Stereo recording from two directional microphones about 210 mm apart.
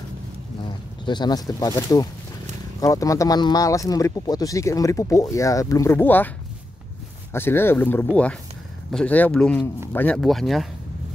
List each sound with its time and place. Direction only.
1.0 s speech: 20° left (ahead or behind)
7.3 s speech: 10° left (ahead or behind)